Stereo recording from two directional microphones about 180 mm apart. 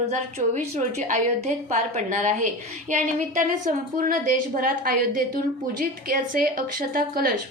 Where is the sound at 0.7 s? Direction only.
40° right (ahead or behind).